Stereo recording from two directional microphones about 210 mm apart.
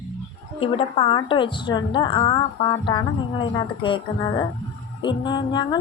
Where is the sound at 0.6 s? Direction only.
25° left (ahead or behind).